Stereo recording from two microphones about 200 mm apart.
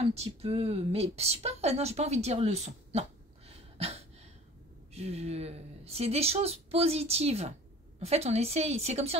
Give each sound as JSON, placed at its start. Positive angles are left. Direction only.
{"t": 0.0, "sound": "speech", "side_deg": -30}